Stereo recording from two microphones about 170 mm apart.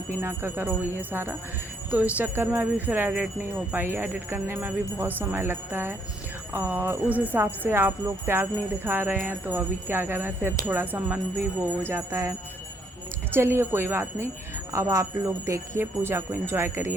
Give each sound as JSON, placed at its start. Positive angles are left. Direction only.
{"t": 0.2, "sound": "jingle bell", "side_deg": -10}
{"t": 13.3, "sound": "jingle bell", "side_deg": -15}